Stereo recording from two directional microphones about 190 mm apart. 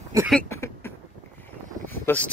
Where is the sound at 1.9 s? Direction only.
10° left (ahead or behind).